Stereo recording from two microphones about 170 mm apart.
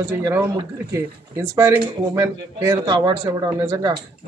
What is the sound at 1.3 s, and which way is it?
Speech, 15° right (ahead or behind).